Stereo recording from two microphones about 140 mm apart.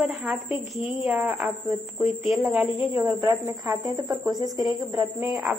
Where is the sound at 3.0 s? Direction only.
25° right (ahead or behind).